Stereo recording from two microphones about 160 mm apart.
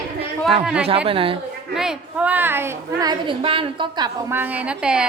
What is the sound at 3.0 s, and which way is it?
A woman's voice, 30° right (ahead or behind).